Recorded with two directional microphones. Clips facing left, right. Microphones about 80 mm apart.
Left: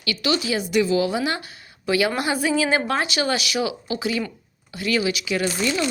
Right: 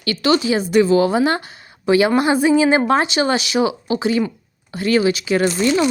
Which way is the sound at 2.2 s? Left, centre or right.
Right.